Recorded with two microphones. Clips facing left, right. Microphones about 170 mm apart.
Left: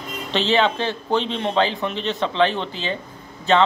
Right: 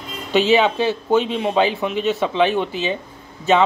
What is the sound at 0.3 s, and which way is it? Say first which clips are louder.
Speech: right 4 dB; 10° right (ahead or behind).